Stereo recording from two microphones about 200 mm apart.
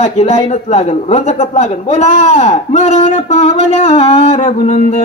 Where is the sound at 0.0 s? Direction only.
35° left (ahead or behind).